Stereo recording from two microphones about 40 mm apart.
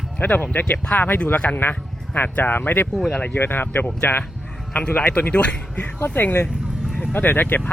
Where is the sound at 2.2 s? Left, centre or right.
Left.